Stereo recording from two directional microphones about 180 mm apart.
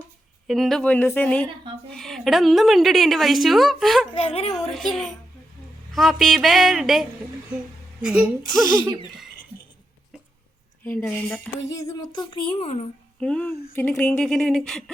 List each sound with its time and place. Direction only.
0.4 s a woman's voice: centre (ahead or behind)
4.1 s a woman's voice: 30° left (ahead or behind)
4.5 s a woman's voice: centre (ahead or behind)
10.8 s speech: 10° left (ahead or behind)
11.7 s speech: 20° left (ahead or behind); by 12.9 s 35° left (ahead or behind)
13.1 s a sound: 5° left (ahead or behind)
13.7 s a woman's voice: 10° left (ahead or behind)